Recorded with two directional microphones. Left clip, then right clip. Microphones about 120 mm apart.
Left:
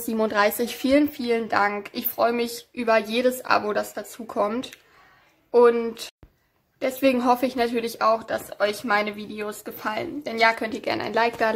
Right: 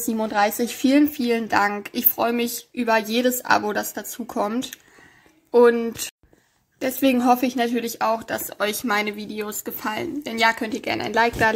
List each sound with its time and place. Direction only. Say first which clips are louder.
0.1 s speech: even; centre (ahead or behind)
0.8 s speech: right 2 dB; 20° right (ahead or behind)
5.5 s speech: right 1 dB; 20° right (ahead or behind)
8.5 s speech: left 1 dB; 30° right (ahead or behind)